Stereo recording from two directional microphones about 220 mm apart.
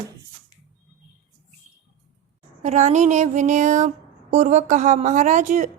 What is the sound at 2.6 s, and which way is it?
A woman's voice, 35° right (ahead or behind).